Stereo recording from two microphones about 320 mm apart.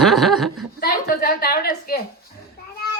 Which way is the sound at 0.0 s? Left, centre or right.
Centre.